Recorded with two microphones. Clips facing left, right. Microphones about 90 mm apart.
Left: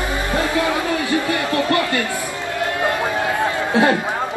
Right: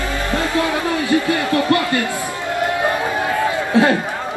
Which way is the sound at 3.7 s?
20° left (ahead or behind).